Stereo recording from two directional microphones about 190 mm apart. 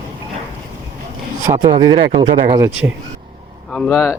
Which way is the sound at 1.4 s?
20° right (ahead or behind).